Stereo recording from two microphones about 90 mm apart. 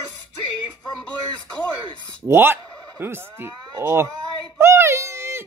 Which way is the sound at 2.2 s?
25° right (ahead or behind).